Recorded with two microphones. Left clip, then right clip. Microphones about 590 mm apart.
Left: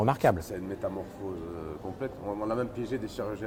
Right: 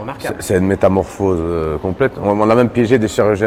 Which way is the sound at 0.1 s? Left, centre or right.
Left.